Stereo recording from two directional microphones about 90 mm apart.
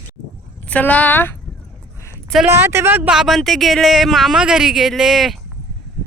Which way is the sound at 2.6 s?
25° right (ahead or behind).